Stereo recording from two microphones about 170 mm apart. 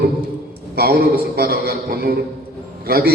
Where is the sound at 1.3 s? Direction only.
65° right (ahead or behind).